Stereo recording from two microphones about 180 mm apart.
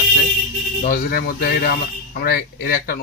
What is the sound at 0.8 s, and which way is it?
Speech, 55° left (ahead or behind).